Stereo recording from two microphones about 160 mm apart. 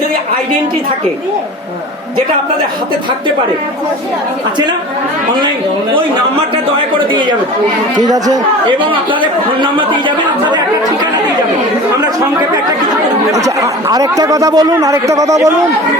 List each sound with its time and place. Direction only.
7.1 s speech: 30° right (ahead or behind)
13.3 s speech: 20° right (ahead or behind)